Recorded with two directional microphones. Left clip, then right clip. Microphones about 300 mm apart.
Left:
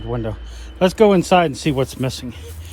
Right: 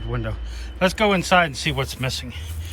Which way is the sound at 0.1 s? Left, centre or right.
Centre.